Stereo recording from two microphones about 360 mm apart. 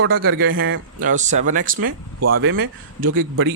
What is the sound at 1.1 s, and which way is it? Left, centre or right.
Speech, centre.